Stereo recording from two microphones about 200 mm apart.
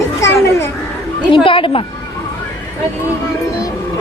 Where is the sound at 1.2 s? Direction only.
25° left (ahead or behind).